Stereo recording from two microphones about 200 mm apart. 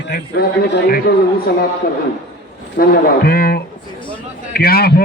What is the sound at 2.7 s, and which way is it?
A man's voice, 45° left (ahead or behind).